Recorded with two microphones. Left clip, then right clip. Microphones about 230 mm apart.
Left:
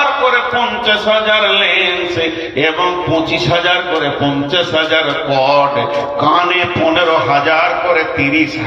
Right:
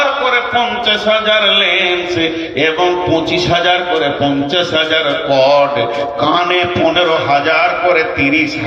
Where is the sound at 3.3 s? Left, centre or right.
Right.